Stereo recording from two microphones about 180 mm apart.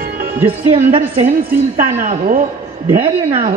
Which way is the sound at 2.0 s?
45° right (ahead or behind).